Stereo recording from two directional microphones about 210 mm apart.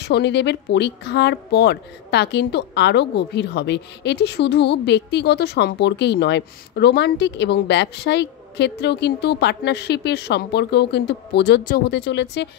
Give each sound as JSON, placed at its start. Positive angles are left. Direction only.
{"t": 0.0, "sound": "speech", "side_deg": 55}